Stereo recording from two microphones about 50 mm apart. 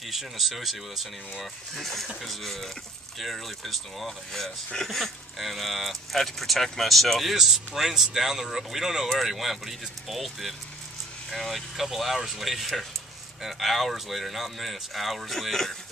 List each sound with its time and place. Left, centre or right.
0.1 s speech: centre